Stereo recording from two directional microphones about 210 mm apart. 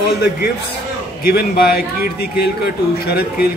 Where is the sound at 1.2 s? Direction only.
45° left (ahead or behind).